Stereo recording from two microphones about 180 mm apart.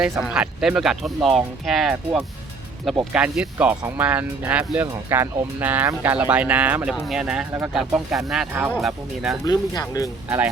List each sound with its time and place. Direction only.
0.0 s speech: 5° right (ahead or behind)
9.4 s speech: 20° left (ahead or behind)
10.2 s speech: 10° right (ahead or behind)